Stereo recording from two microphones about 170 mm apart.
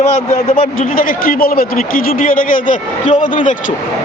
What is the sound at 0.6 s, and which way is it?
Speech, 55° left (ahead or behind).